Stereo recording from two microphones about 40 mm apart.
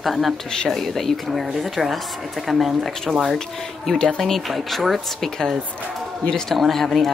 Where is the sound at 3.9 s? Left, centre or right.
Centre.